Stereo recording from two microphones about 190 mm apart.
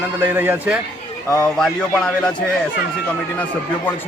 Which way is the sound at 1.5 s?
5° left (ahead or behind).